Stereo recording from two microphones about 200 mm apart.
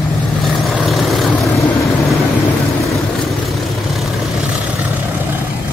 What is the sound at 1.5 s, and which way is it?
Vehicle, 15° left (ahead or behind).